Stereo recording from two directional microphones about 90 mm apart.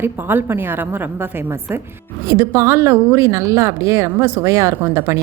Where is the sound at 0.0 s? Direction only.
25° right (ahead or behind).